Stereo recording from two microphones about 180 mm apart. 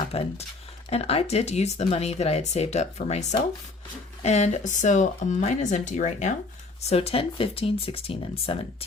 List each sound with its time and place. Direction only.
0.1 s speech: 35° left (ahead or behind)